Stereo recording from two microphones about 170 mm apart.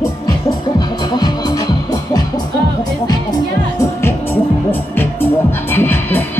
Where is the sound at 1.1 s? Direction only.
25° left (ahead or behind).